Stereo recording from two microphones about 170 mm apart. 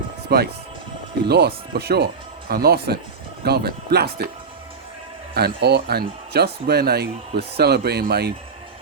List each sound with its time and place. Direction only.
0.3 s speech: 70° right (ahead or behind)
5.3 s speech: 70° right (ahead or behind)